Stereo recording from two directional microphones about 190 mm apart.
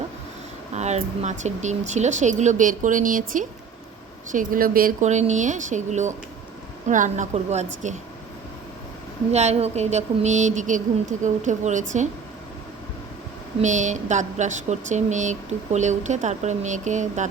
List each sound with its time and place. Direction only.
0.7 s speech: 35° right (ahead or behind)
9.3 s speech: 35° right (ahead or behind)
13.6 s speech: 40° right (ahead or behind)